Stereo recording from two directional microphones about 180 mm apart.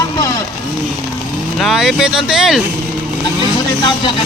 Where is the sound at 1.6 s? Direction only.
Centre (ahead or behind).